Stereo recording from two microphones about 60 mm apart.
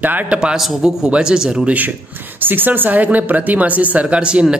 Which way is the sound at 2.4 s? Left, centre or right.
Right.